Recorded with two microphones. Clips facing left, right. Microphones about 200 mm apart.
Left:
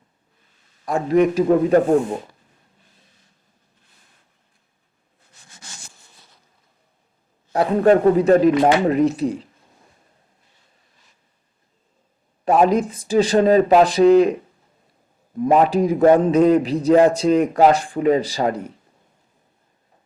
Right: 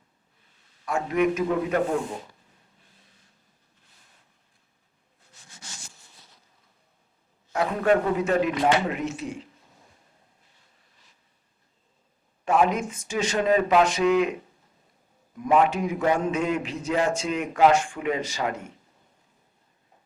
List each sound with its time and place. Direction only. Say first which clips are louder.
0.9 s a man's voice: left 7 dB; 35° left (ahead or behind); by 2.2 s 50° left (ahead or behind)
5.5 s rub: left 2 dB; 55° left (ahead or behind)
7.5 s a man's voice: left 7 dB; 35° left (ahead or behind)
12.5 s a man's voice: left 6 dB; 35° left (ahead or behind)
15.4 s a man's voice: left 6 dB; 35° left (ahead or behind)